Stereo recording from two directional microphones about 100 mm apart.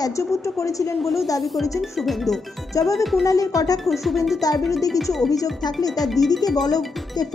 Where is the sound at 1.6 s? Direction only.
Centre (ahead or behind).